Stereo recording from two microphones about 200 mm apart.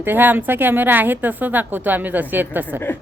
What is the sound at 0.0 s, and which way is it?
A woman's voice, 10° right (ahead or behind).